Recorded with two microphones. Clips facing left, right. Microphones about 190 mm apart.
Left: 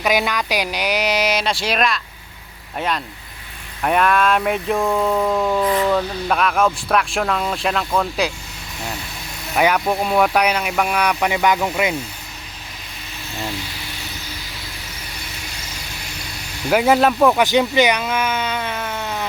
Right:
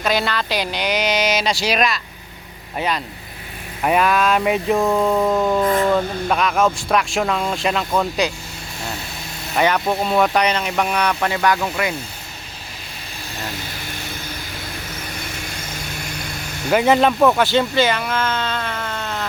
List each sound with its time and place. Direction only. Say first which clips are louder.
0.0 s speech: left 1 dB; 15° left (ahead or behind)
9.6 s speech: left 1 dB; 5° left (ahead or behind)
16.6 s speech: even; 5° left (ahead or behind)
17.3 s speech: left 1 dB; 15° left (ahead or behind)